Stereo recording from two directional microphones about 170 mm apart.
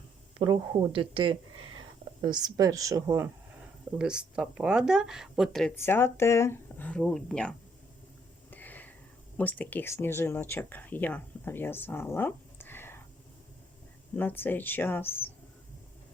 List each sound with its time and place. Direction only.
0.3 s speech: 30° right (ahead or behind)
3.9 s speech: 5° right (ahead or behind)
5.7 s speech: 15° left (ahead or behind)
8.4 s a sound: 10° left (ahead or behind)
9.4 s speech: 10° left (ahead or behind)
14.2 s speech: 10° left (ahead or behind)